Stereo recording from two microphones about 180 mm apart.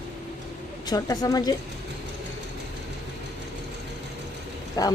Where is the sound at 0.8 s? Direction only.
20° left (ahead or behind).